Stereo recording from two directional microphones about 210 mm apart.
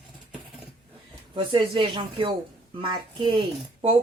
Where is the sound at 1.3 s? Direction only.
25° right (ahead or behind).